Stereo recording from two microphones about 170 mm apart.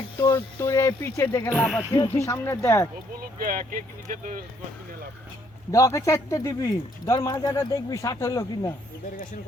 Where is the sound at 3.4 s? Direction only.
55° right (ahead or behind).